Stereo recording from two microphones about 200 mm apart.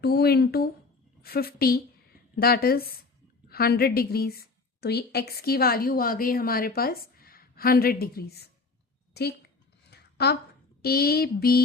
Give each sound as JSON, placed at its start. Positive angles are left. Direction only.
{"t": 0.0, "sound": "a woman's voice", "side_deg": 50}
{"t": 9.9, "sound": "a sound", "side_deg": 55}
{"t": 10.8, "sound": "a woman's voice", "side_deg": 50}